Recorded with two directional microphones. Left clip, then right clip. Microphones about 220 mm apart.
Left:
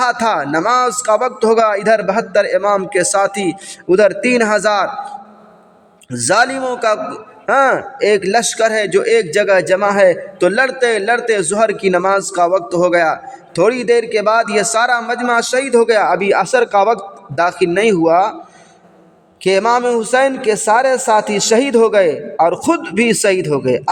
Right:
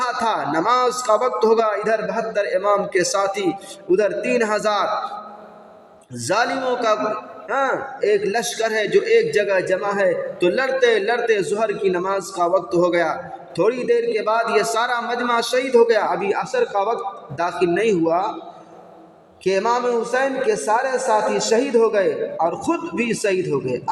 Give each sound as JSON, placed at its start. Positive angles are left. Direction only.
{"t": 0.0, "sound": "a man's voice", "side_deg": 55}
{"t": 6.1, "sound": "a man's voice", "side_deg": 50}
{"t": 19.5, "sound": "a man's voice", "side_deg": 50}